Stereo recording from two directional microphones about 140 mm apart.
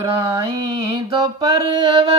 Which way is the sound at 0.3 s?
35° right (ahead or behind).